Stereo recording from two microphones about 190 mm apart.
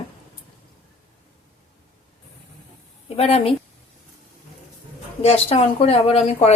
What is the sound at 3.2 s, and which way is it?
Speech, 30° left (ahead or behind).